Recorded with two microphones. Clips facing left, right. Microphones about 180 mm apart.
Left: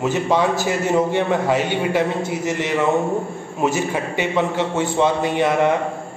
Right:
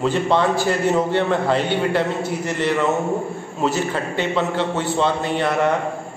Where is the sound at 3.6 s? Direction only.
10° left (ahead or behind).